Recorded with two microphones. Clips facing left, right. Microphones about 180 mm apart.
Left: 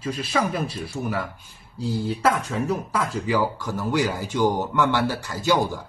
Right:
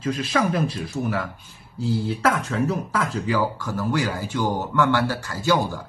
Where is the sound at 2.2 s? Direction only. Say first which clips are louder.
Even; 10° left (ahead or behind).